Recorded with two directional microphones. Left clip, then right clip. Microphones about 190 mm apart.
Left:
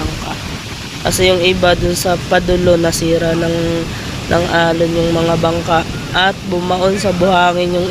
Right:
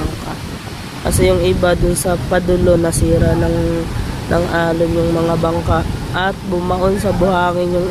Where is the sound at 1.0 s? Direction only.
10° right (ahead or behind).